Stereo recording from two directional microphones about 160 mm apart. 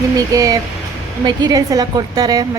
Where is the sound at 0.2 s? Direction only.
20° right (ahead or behind).